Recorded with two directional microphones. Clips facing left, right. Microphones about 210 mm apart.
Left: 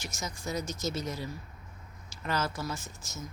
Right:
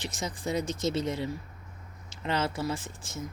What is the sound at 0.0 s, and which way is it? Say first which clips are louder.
Speech: right 4 dB; 30° right (ahead or behind).